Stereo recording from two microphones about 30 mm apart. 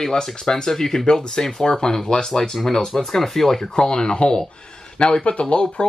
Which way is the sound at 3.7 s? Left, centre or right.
Left.